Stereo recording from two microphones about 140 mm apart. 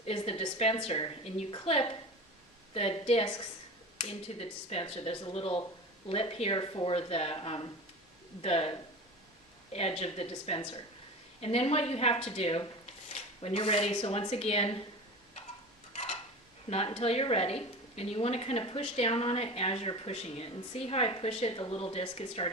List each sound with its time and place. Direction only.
0.0 s a woman's voice: 45° left (ahead or behind)
15.9 s a sound: 45° left (ahead or behind)
16.6 s a woman's voice: 45° left (ahead or behind)